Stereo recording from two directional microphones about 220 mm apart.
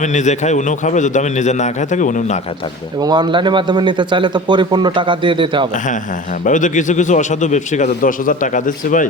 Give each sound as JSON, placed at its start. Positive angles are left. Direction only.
{"t": 0.0, "sound": "a man's voice", "side_deg": 35}
{"t": 3.0, "sound": "a man's voice", "side_deg": -20}
{"t": 6.4, "sound": "a man's voice", "side_deg": 35}